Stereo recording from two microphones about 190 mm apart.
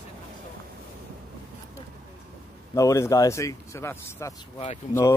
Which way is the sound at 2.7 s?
15° left (ahead or behind).